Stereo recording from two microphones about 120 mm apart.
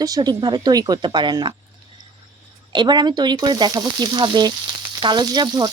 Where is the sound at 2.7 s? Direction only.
40° right (ahead or behind).